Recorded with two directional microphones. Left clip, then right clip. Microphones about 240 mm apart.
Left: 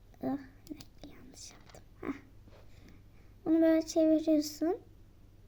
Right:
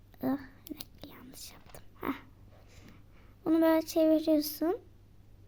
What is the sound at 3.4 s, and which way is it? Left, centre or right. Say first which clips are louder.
Speech: right 1 dB; right.